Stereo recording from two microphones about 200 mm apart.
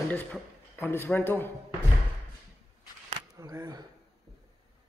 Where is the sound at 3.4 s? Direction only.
20° right (ahead or behind).